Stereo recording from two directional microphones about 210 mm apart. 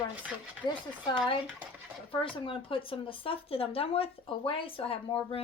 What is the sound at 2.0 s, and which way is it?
Speech, 25° left (ahead or behind).